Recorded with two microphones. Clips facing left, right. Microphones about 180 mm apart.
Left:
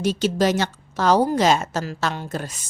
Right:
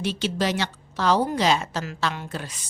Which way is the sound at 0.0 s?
45° left (ahead or behind).